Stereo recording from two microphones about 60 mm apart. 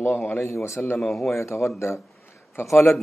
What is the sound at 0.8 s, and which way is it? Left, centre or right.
Speech, left.